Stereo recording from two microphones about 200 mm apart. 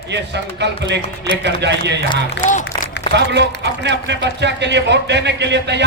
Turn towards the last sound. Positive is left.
turn(degrees=-60)  # may be behind; listen again after turning